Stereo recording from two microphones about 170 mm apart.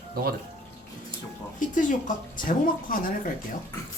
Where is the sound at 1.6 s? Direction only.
50° left (ahead or behind).